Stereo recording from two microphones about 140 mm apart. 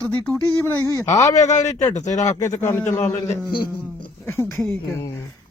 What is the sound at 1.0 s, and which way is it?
Speech, 25° left (ahead or behind).